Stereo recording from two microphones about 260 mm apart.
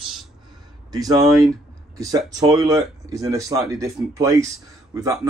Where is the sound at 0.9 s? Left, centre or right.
Centre.